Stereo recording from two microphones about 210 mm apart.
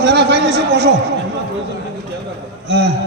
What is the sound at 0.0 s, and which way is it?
Speech, 55° right (ahead or behind).